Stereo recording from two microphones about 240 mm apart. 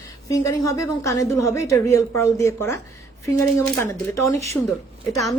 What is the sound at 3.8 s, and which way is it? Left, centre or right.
Speech, left.